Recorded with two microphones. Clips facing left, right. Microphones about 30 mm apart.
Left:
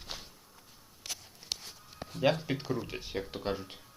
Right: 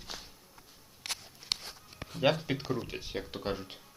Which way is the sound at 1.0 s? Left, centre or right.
Right.